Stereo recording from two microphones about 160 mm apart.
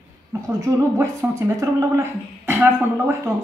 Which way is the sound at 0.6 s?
20° right (ahead or behind).